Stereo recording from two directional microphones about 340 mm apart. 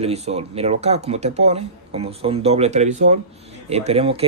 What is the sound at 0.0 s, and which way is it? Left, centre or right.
Speech, centre.